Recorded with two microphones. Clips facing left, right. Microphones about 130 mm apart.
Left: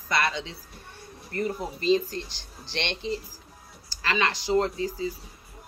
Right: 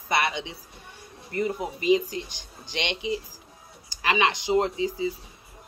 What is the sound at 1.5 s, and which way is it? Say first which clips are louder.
A woman's voice: right 1 dB; 15° right (ahead or behind).